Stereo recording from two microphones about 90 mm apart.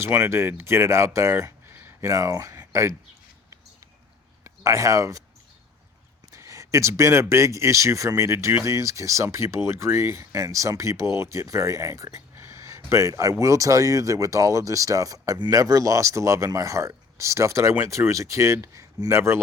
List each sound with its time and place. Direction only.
0.0 s speech: 30° right (ahead or behind)
2.6 s a sound: 30° right (ahead or behind)
4.4 s speech: 35° right (ahead or behind)
6.3 s speech: 35° right (ahead or behind)